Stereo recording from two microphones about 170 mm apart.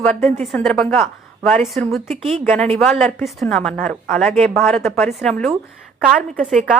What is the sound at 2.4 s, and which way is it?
A woman's voice, 10° left (ahead or behind).